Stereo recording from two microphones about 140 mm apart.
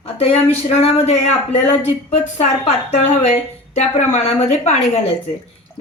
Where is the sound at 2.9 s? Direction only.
55° left (ahead or behind).